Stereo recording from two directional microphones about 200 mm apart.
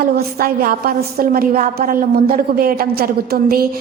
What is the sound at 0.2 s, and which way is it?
A woman's voice, 50° right (ahead or behind).